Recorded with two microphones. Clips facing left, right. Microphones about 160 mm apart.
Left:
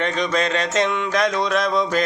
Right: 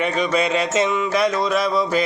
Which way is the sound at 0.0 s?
5° right (ahead or behind).